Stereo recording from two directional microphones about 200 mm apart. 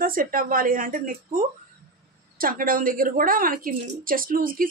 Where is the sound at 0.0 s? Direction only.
45° right (ahead or behind).